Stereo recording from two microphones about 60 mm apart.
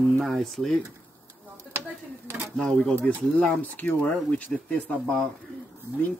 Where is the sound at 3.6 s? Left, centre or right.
Left.